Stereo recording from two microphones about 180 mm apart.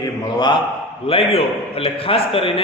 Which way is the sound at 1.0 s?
30° left (ahead or behind).